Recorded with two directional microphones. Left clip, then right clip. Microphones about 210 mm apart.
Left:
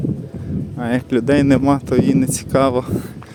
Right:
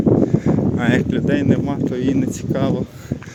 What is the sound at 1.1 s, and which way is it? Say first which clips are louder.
Speech: left 4 dB; 30° left (ahead or behind).